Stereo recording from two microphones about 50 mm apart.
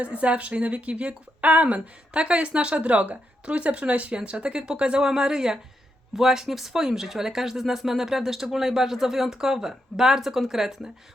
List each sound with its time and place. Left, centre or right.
0.0 s a woman's voice: right; by 10.9 s centre